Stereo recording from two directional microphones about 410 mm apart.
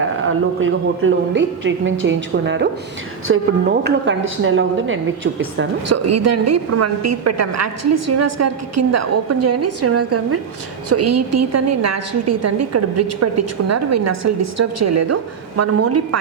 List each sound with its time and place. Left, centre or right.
0.3 s a woman's voice: right